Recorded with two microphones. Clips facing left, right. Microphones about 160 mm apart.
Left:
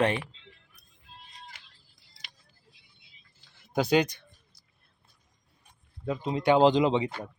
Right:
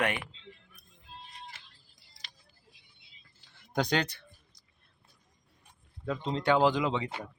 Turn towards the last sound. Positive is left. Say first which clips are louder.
# left 5 dB
turn(degrees=20)  # may be behind; listen again after turning